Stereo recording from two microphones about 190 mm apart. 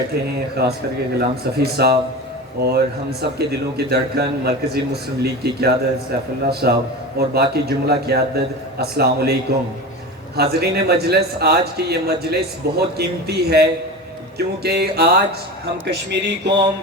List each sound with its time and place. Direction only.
0.1 s speech: 55° right (ahead or behind)
10.3 s speech: 55° right (ahead or behind)